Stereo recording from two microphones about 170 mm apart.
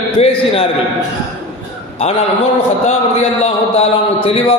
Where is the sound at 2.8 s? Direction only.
35° left (ahead or behind).